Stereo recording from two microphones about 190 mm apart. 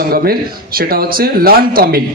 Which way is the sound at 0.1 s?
50° right (ahead or behind).